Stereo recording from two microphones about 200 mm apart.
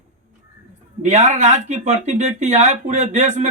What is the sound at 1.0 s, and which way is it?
Speech, 35° right (ahead or behind).